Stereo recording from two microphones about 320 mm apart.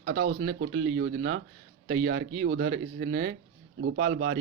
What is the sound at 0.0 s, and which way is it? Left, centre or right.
Speech, right.